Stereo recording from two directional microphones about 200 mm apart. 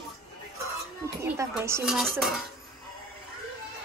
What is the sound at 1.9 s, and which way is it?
Dishes, centre (ahead or behind).